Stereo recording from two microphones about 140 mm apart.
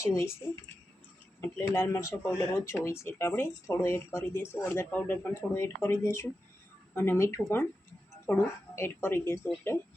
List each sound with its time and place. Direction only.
1.4 s speech: 15° left (ahead or behind)